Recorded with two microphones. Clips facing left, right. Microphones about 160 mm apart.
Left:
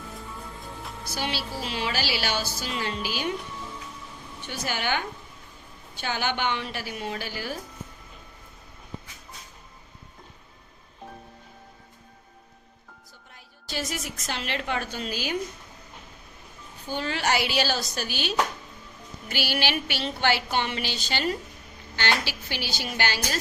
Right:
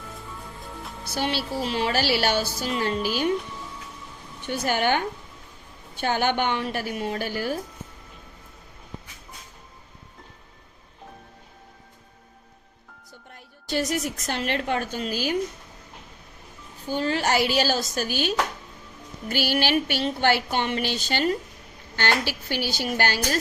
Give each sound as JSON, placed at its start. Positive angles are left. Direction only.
{"t": 1.0, "sound": "a woman's voice", "side_deg": -55}
{"t": 4.4, "sound": "a woman's voice", "side_deg": -50}
{"t": 13.3, "sound": "music", "side_deg": -55}
{"t": 14.3, "sound": "a woman's voice", "side_deg": -50}
{"t": 17.0, "sound": "a woman's voice", "side_deg": -40}
{"t": 19.3, "sound": "a woman's voice", "side_deg": -50}